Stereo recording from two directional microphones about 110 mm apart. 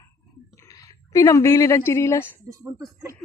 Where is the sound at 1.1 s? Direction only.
30° left (ahead or behind).